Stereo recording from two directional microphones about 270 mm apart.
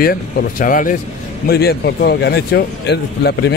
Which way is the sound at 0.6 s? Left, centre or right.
Left.